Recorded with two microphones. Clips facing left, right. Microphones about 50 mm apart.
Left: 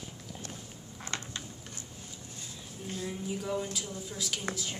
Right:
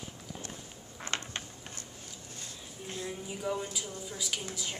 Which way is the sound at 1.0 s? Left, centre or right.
Right.